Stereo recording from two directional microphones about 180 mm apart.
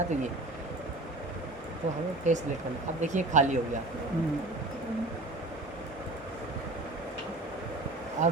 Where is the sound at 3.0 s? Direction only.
40° right (ahead or behind).